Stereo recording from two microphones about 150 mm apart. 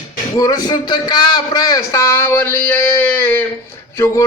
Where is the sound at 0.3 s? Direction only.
25° left (ahead or behind).